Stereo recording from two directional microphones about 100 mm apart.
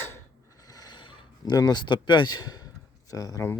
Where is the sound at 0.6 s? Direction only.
40° left (ahead or behind).